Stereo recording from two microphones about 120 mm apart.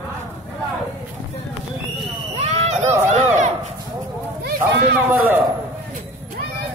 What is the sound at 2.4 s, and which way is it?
Horse, 65° right (ahead or behind).